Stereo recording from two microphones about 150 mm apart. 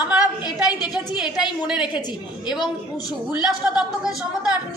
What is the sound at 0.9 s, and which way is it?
Speech, 5° right (ahead or behind).